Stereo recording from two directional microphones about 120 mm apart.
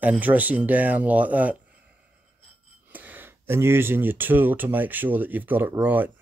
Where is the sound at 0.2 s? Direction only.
15° right (ahead or behind).